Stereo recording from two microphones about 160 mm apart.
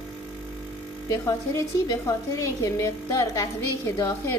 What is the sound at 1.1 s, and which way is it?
A woman's voice, 20° left (ahead or behind).